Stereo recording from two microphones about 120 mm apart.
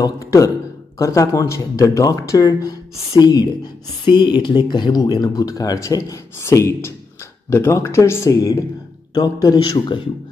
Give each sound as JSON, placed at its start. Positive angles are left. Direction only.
{"t": 0.0, "sound": "speech", "side_deg": 25}